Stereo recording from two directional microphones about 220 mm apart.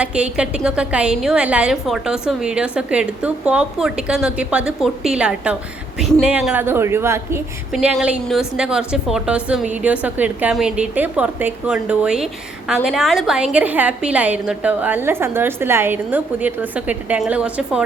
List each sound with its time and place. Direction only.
0.0 s a woman's voice: 5° right (ahead or behind)